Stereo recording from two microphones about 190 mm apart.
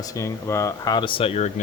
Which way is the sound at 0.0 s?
15° left (ahead or behind).